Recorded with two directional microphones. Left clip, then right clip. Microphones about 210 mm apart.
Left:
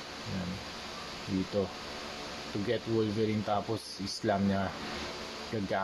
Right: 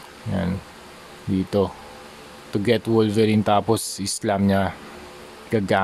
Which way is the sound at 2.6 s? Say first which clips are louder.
Right 12 dB; 45° right (ahead or behind).